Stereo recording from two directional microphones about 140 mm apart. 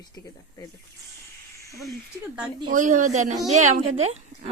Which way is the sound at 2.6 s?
65° right (ahead or behind).